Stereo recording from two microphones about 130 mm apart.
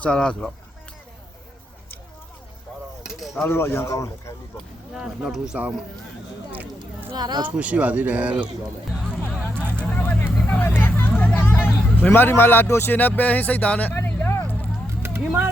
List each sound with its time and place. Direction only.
0.0 s speech: 5° left (ahead or behind)
3.0 s a sound: centre (ahead or behind)
3.4 s speech: 20° left (ahead or behind)
4.5 s speech: 5° right (ahead or behind)
7.2 s speech: 30° right (ahead or behind)
7.4 s speech: 10° right (ahead or behind)
9.2 s vehicle: 10° left (ahead or behind)
12.0 s speech: 15° left (ahead or behind)
13.9 s vehicle: 15° left (ahead or behind)
15.0 s music: 15° right (ahead or behind)